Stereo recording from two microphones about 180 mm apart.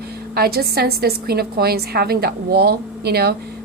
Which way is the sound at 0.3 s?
60° right (ahead or behind).